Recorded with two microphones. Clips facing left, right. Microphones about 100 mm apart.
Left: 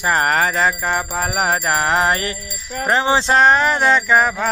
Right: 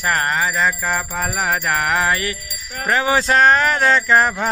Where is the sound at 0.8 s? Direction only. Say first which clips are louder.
Left 2 dB; 20° left (ahead or behind).